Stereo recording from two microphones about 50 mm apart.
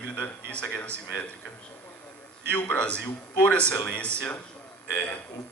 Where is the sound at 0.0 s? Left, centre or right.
Left.